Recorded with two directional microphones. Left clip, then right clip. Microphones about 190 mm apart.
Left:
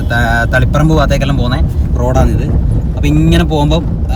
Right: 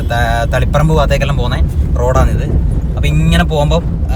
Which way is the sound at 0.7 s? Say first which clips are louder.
Left 1 dB; 10° left (ahead or behind).